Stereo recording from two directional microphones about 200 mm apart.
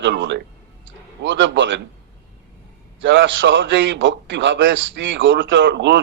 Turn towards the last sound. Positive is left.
turn(degrees=-60)  # may be behind; listen again after turning